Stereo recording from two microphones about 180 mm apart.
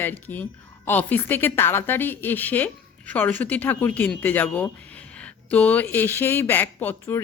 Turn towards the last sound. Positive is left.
turn(degrees=10)  # may be behind; listen again after turning